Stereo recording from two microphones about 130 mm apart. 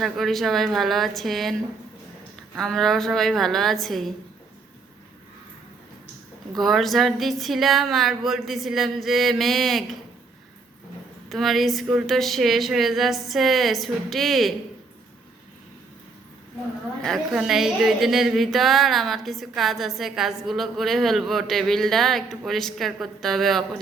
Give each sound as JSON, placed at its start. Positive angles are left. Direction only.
{"t": 0.0, "sound": "a woman's voice", "side_deg": 0}
{"t": 2.6, "sound": "a woman's voice", "side_deg": 0}
{"t": 6.6, "sound": "a woman's voice", "side_deg": 0}
{"t": 11.3, "sound": "a woman's voice", "side_deg": 0}
{"t": 17.0, "sound": "a woman's voice", "side_deg": 0}